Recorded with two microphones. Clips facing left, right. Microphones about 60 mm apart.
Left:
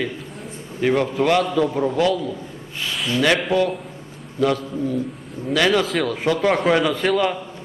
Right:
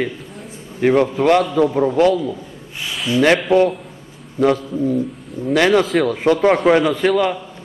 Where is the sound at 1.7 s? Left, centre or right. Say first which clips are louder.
Right 4 dB; centre.